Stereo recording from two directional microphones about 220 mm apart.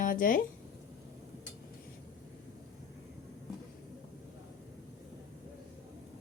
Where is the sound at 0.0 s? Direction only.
40° left (ahead or behind).